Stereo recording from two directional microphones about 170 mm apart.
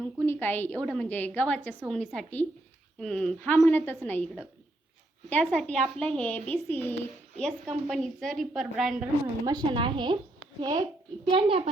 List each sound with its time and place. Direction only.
0.0 s a woman's voice: 10° left (ahead or behind)
9.5 s a woman's voice: 25° right (ahead or behind)